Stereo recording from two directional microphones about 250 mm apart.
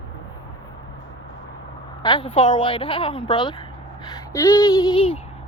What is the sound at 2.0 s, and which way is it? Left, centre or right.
A woman's voice, centre.